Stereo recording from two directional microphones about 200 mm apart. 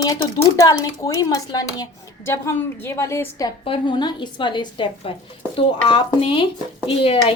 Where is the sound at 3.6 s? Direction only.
25° left (ahead or behind).